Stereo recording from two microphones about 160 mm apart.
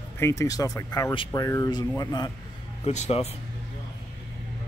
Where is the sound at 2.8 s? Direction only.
40° left (ahead or behind).